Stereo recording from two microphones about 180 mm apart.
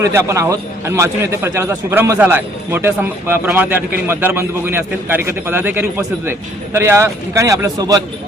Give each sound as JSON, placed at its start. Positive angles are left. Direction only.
{"t": 0.0, "sound": "a man's voice", "side_deg": -15}